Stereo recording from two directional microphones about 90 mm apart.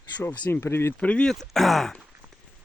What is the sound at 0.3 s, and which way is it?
Speech, 20° left (ahead or behind).